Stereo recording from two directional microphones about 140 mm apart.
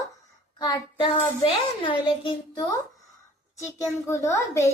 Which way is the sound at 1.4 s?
35° left (ahead or behind).